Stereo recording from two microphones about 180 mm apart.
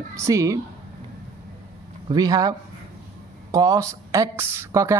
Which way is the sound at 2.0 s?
20° right (ahead or behind).